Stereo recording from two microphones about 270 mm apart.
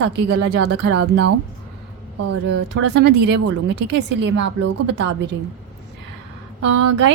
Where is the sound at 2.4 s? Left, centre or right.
Right.